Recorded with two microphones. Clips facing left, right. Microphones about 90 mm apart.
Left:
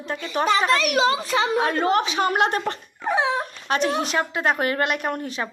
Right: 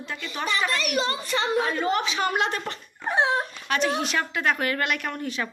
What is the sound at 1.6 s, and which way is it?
Speech, 55° left (ahead or behind).